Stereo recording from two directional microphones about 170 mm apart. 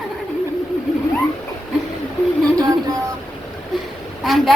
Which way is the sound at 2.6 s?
20° right (ahead or behind).